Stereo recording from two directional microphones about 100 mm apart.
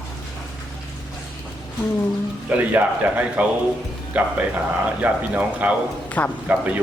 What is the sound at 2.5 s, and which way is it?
A man's voice, 15° right (ahead or behind).